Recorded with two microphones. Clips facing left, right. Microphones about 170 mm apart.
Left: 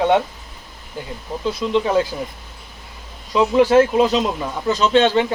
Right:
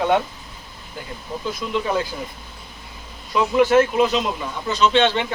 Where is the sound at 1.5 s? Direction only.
30° left (ahead or behind).